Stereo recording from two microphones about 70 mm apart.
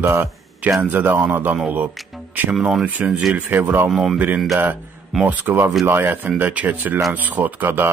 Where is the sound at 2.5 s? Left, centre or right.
Centre.